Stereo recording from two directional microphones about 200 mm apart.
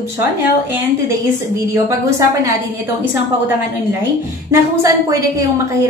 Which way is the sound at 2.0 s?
15° right (ahead or behind).